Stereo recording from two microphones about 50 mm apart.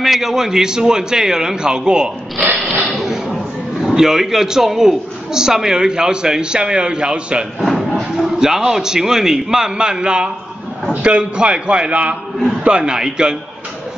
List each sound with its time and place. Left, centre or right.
0.0 s a man's voice: centre
2.9 s a sound: centre
3.8 s a man's voice: centre
7.6 s a man's voice: centre